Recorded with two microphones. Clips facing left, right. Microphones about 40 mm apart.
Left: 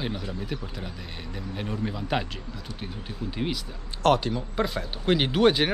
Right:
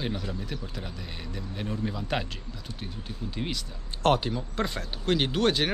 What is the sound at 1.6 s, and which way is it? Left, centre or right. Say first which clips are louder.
Speech: left 1 dB; centre.